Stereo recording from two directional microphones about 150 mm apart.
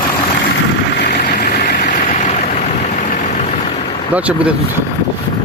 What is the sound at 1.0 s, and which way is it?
Vehicle, 90° left.